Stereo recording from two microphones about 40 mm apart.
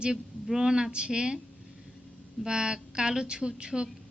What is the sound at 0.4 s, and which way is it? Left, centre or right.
Speech, centre.